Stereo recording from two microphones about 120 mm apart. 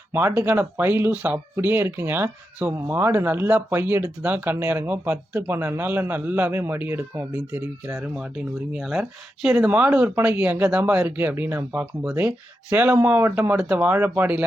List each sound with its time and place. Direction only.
0.1 s speech: 20° right (ahead or behind)
8.0 s speech: 10° right (ahead or behind)